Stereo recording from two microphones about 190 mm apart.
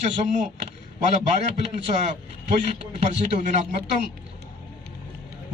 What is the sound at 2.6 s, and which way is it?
Speech, 40° right (ahead or behind).